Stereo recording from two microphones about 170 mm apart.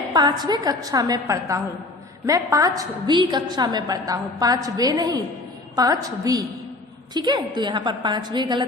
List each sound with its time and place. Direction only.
0.1 s a woman's voice: 25° right (ahead or behind)